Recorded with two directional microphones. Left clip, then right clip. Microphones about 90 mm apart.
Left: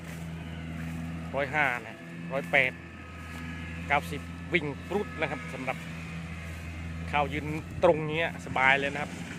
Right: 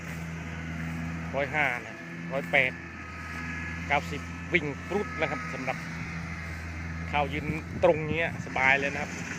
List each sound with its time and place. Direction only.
1.4 s speech: 15° left (ahead or behind)
3.8 s speech: 5° left (ahead or behind)
7.1 s speech: 15° left (ahead or behind)